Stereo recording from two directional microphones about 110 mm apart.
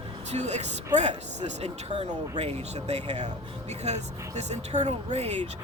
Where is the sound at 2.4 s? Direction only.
70° right (ahead or behind).